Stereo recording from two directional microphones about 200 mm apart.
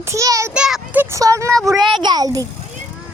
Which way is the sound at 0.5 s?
5° right (ahead or behind).